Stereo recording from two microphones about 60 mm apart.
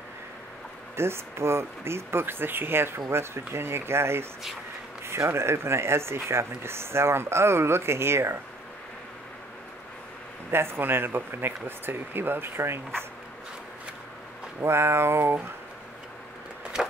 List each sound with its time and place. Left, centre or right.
0.9 s speech: right
10.5 s speech: right
14.6 s speech: right